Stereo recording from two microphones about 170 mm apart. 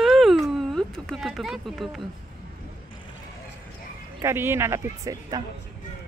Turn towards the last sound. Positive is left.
turn(degrees=-20)  # may be behind; listen again after turning